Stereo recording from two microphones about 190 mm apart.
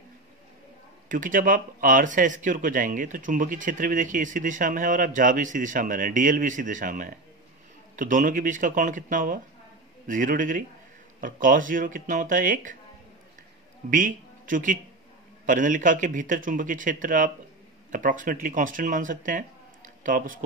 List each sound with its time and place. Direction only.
1.0 s speech: 45° right (ahead or behind)
13.8 s speech: 45° right (ahead or behind)